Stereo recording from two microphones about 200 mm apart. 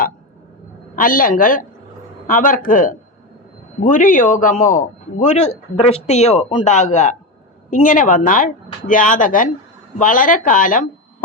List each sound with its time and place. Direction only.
0.9 s a man's voice: 45° left (ahead or behind)